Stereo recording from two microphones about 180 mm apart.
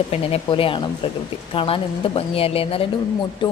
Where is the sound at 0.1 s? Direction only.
30° left (ahead or behind).